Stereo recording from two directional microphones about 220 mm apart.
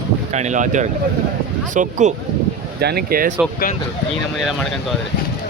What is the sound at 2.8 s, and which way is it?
Speech, 45° right (ahead or behind).